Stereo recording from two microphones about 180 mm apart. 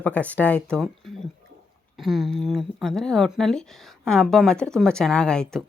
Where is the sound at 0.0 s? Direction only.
10° left (ahead or behind).